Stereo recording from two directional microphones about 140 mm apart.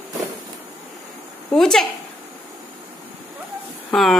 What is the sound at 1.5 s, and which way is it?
Speech, centre (ahead or behind).